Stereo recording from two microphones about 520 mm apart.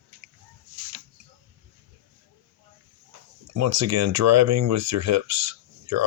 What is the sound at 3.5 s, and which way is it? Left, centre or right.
Speech, right.